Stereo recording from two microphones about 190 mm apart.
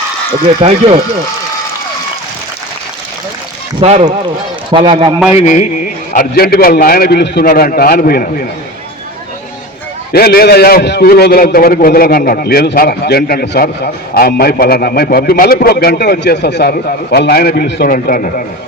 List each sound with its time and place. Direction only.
0.4 s speech: 30° right (ahead or behind)
3.8 s a man's voice: 35° right (ahead or behind)
5.3 s a sound: 40° left (ahead or behind)
6.1 s a man's voice: 55° left (ahead or behind)
10.1 s a man's voice: 55° left (ahead or behind)